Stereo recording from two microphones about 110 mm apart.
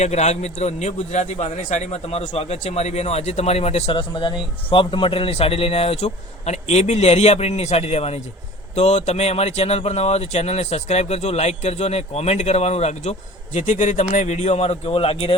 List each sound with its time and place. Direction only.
0.0 s a man's voice: 90° left; by 4.0 s 65° left (ahead or behind)
4.1 s speech: 45° left (ahead or behind); by 15.4 s 65° left (ahead or behind)